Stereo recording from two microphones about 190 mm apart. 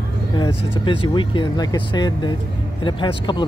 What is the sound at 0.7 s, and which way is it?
Speech, 25° left (ahead or behind).